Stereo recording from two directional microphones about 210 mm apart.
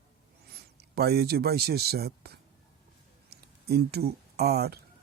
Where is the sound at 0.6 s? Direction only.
50° right (ahead or behind).